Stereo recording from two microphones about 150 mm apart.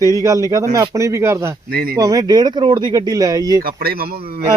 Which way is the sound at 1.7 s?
80° right.